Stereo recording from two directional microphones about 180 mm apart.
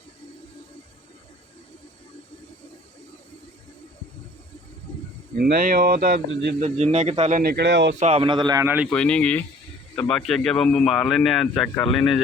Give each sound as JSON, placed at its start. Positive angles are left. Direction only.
{"t": 5.4, "sound": "speech", "side_deg": -55}
{"t": 6.6, "sound": "a man's voice", "side_deg": -40}
{"t": 7.9, "sound": "a man's voice", "side_deg": -35}
{"t": 8.6, "sound": "a man's voice", "side_deg": -10}
{"t": 8.9, "sound": "a man's voice", "side_deg": 5}